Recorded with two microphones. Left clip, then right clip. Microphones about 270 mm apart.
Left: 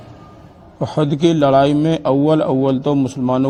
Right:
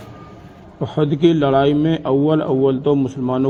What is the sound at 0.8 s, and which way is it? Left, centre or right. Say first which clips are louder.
A man's voice: even; left.